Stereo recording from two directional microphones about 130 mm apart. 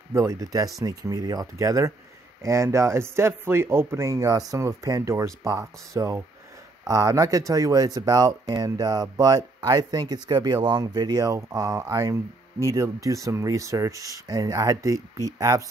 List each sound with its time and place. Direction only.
0.1 s speech: 25° right (ahead or behind)